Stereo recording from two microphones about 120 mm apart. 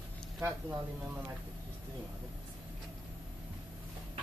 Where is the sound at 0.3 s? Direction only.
15° right (ahead or behind).